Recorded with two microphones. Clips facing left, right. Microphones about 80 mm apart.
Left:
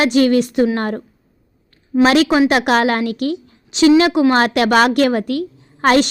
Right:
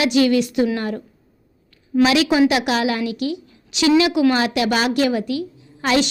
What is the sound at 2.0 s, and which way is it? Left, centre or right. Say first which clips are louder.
A woman's voice: left 3 dB; left.